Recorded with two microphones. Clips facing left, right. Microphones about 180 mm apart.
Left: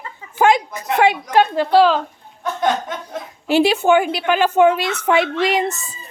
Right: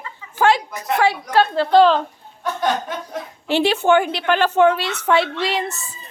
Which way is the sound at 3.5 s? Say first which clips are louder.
Left 2 dB; 10° left (ahead or behind).